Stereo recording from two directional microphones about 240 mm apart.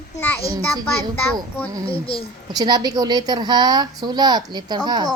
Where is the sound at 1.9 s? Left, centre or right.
Left.